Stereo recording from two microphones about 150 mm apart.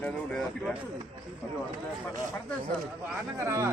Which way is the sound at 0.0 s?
5° left (ahead or behind).